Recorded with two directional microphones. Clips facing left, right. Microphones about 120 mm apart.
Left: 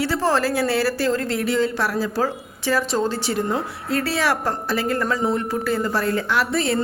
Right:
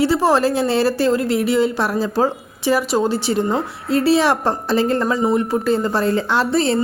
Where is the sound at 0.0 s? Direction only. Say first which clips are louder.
Right 5 dB; 15° right (ahead or behind).